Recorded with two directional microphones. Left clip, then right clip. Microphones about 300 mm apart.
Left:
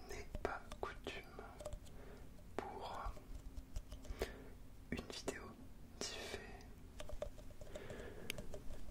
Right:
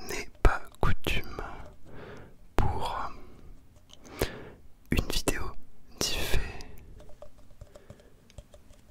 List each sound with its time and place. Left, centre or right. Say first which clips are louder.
0.0 s whispering: right 15 dB; right
4.2 s a sound: right 13 dB; right
4.8 s whispering: right 16 dB; right
8.3 s typing: left 8 dB; left